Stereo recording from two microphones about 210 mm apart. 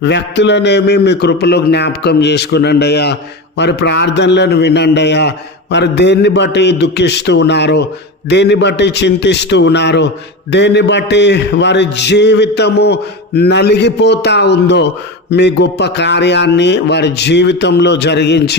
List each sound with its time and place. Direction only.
0.0 s a man's voice: 55° left (ahead or behind)